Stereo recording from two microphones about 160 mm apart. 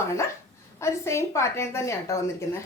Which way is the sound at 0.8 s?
15° left (ahead or behind).